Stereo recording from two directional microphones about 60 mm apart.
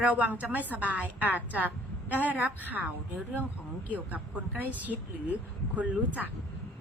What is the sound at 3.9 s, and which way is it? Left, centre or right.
A woman's voice, right.